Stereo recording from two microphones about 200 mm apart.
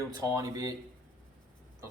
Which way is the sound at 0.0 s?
15° right (ahead or behind).